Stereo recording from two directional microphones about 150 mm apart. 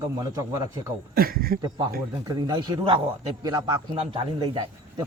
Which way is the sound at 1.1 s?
80° right.